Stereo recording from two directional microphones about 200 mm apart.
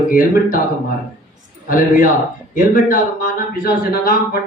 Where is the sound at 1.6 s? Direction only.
45° left (ahead or behind).